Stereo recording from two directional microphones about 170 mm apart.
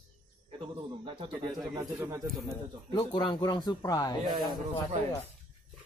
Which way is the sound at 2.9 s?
25° left (ahead or behind).